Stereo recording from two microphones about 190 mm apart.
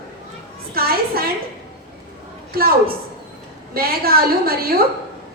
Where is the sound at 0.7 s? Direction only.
50° right (ahead or behind).